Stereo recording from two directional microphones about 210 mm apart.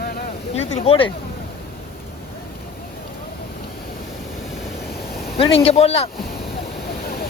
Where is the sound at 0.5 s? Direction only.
30° left (ahead or behind).